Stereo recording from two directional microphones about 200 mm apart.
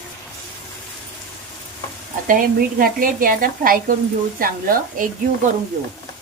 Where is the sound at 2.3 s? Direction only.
45° right (ahead or behind).